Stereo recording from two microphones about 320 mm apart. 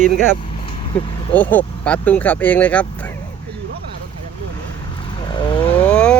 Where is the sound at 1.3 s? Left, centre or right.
Centre.